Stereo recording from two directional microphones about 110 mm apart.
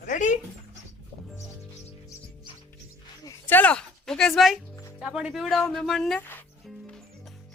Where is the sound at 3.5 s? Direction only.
15° left (ahead or behind).